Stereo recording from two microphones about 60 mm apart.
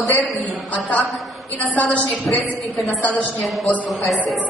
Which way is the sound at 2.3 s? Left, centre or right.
Centre.